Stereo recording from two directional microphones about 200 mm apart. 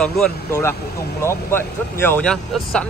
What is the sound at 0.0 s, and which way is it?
A man's voice, 5° left (ahead or behind).